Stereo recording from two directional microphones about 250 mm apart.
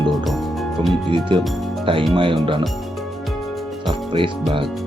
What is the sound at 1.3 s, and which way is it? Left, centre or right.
Speech, centre.